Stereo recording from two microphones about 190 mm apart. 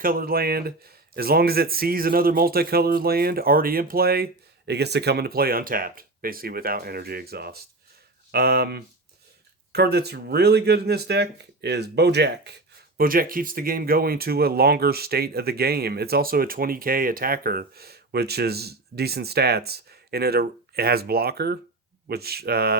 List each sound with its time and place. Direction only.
0.0 s speech: 50° right (ahead or behind)
13.0 s speech: 50° right (ahead or behind)